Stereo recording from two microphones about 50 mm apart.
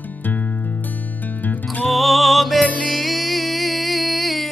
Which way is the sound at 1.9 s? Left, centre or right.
Centre.